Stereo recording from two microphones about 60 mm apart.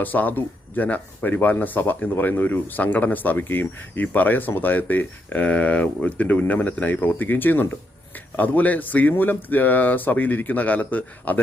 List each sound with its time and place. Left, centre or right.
0.0 s speech: left